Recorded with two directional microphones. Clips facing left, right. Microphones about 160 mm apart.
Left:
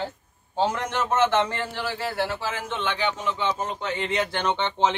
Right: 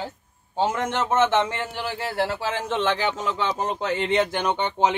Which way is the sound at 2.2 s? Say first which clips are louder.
Right 6 dB; 35° right (ahead or behind).